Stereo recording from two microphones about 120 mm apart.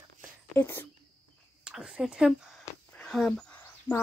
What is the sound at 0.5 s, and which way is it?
Speech, 20° left (ahead or behind).